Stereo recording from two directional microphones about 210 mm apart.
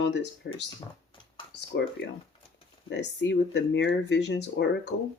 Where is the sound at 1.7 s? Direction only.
55° left (ahead or behind).